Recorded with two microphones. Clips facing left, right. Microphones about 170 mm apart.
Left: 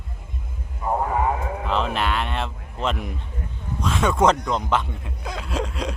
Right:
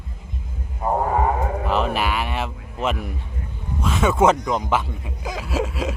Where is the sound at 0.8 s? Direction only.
45° right (ahead or behind).